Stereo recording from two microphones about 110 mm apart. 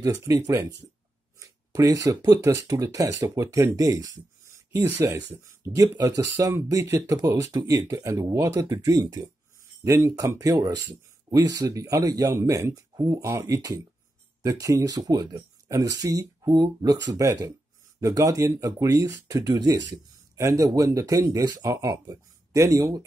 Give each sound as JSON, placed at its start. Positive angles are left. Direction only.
{"t": 0.0, "sound": "speech", "side_deg": -30}